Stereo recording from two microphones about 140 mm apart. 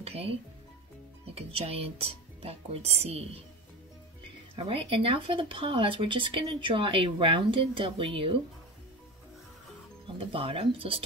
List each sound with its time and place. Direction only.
0.0 s music: 45° right (ahead or behind)
1.2 s speech: 45° right (ahead or behind)
4.6 s speech: 40° right (ahead or behind)
10.1 s speech: 40° right (ahead or behind)